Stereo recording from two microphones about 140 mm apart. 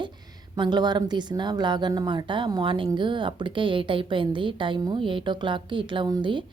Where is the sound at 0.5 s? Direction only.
30° right (ahead or behind).